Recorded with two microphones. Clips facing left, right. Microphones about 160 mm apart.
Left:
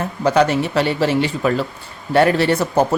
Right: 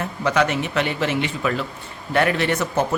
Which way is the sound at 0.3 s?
35° left (ahead or behind).